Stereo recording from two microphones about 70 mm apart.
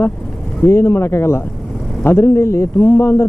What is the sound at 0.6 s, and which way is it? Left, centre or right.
Speech, left.